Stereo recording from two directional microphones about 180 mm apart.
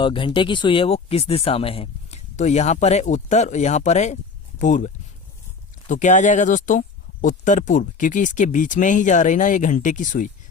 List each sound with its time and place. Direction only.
0.0 s speech: 25° left (ahead or behind)
5.9 s speech: 45° left (ahead or behind)